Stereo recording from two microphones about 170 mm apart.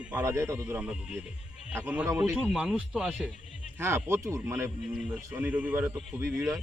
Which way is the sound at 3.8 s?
15° right (ahead or behind).